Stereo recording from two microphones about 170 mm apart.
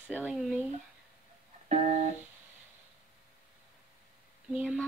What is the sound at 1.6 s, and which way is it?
Music, 40° right (ahead or behind).